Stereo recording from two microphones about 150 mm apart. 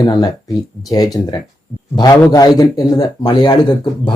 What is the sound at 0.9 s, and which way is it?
Speech, 25° left (ahead or behind).